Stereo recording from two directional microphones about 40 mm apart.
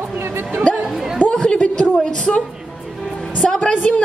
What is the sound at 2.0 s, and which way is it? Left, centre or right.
Speech, centre.